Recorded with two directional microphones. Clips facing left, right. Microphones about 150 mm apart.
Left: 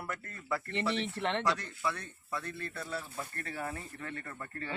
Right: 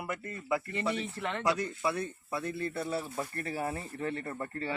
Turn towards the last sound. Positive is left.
turn(degrees=-30)  # may be behind; listen again after turning